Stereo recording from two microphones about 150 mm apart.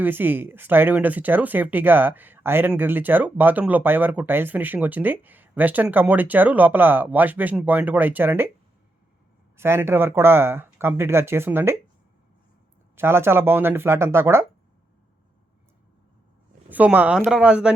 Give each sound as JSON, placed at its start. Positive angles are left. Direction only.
{"t": 0.0, "sound": "speech", "side_deg": -15}
{"t": 9.6, "sound": "speech", "side_deg": -15}
{"t": 13.0, "sound": "speech", "side_deg": -15}
{"t": 16.6, "sound": "speech", "side_deg": -10}